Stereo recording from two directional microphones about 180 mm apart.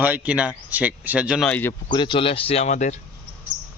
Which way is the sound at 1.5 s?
10° left (ahead or behind).